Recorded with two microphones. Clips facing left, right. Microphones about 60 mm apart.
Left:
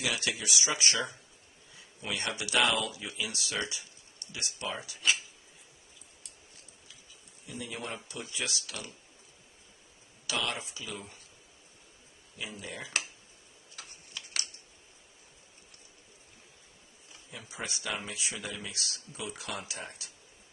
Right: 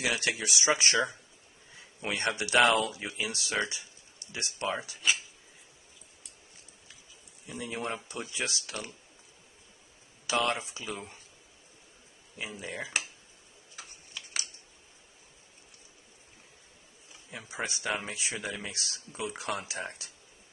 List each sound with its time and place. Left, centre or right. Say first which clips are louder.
0.0 s speech: right 3 dB; right
4.9 s speech: left 3 dB; centre
7.4 s speech: right 4 dB; right
10.2 s speech: right 5 dB; right
12.4 s speech: right 3 dB; right
13.8 s typing: left 1 dB; centre
17.3 s speech: right 4 dB; right